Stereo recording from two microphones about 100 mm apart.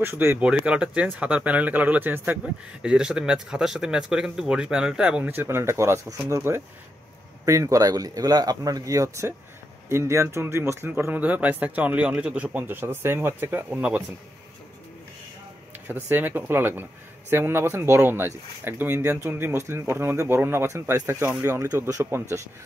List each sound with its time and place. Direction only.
0.0 s a man's voice: 25° right (ahead or behind)
0.4 s speech: 10° right (ahead or behind)
5.3 s a man's voice: 25° right (ahead or behind)
15.9 s a man's voice: 20° right (ahead or behind)